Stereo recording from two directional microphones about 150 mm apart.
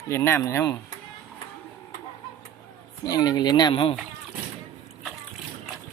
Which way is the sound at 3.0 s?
25° left (ahead or behind).